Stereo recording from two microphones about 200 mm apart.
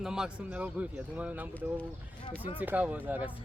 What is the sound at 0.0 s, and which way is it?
Speech, 5° right (ahead or behind).